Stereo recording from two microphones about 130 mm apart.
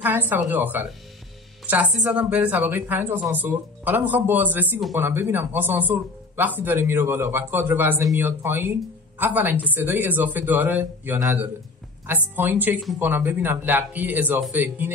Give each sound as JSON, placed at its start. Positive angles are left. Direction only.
{"t": 0.0, "sound": "a woman's voice", "side_deg": -15}